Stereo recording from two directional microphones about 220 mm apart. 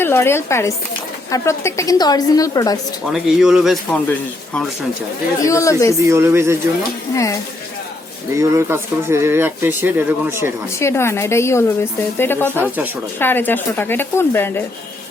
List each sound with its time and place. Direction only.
0.0 s a woman's voice: 10° left (ahead or behind)
3.1 s a man's voice: centre (ahead or behind); by 6.0 s 15° left (ahead or behind)
6.1 s speech: 10° right (ahead or behind)
8.4 s speech: 10° right (ahead or behind)
10.8 s a woman's voice: 10° left (ahead or behind)
12.6 s speech: 10° right (ahead or behind)
13.1 s a woman's voice: 10° left (ahead or behind)